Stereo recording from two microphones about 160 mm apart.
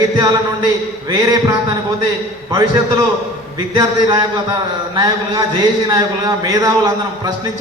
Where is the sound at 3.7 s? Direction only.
25° right (ahead or behind).